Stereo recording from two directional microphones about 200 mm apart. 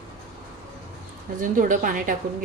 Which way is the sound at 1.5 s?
40° right (ahead or behind).